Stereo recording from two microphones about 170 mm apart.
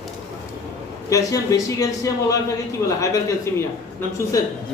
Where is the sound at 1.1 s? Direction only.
20° left (ahead or behind).